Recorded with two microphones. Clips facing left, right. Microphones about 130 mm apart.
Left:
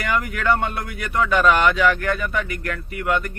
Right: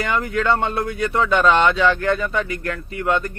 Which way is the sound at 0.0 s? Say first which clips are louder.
Right 2 dB; 30° right (ahead or behind).